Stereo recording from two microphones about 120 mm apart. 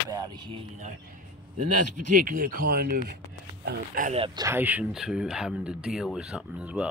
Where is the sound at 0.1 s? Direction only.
40° right (ahead or behind).